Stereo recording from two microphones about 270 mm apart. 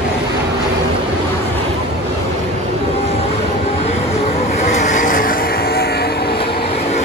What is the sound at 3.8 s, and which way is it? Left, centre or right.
Vehicle, left.